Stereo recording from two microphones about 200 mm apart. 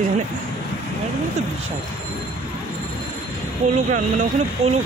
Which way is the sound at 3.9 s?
40° right (ahead or behind).